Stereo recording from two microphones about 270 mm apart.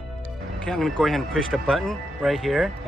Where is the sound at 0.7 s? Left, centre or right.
Centre.